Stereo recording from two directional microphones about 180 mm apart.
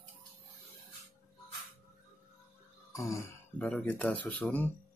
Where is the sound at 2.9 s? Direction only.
15° left (ahead or behind).